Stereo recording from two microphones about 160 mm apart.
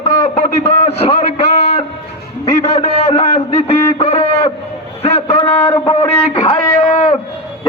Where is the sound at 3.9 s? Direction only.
35° left (ahead or behind).